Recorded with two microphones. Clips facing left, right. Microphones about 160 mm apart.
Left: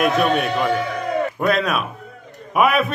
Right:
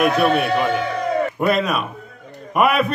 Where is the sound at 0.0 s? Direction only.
Centre (ahead or behind).